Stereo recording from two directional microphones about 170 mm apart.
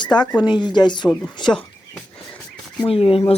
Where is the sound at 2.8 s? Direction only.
35° left (ahead or behind).